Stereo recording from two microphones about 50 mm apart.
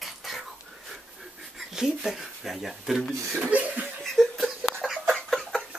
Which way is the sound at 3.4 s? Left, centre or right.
Right.